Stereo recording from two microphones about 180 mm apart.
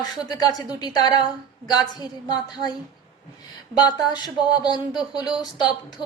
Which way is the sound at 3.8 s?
20° left (ahead or behind).